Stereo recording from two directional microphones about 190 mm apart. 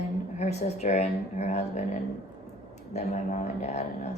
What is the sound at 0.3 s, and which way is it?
A woman's voice, 35° left (ahead or behind).